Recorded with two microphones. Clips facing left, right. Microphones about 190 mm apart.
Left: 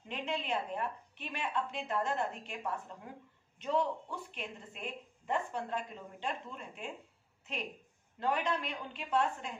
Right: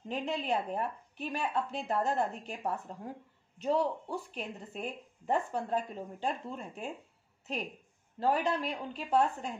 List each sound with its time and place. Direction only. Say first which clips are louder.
0.1 s speech: right 4 dB; 40° right (ahead or behind)
8.2 s speech: right 4 dB; 35° right (ahead or behind)